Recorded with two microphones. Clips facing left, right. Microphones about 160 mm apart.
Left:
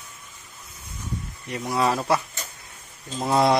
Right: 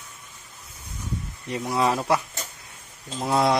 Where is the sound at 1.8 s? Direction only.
10° right (ahead or behind).